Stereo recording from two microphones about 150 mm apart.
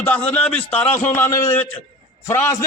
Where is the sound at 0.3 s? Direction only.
10° left (ahead or behind).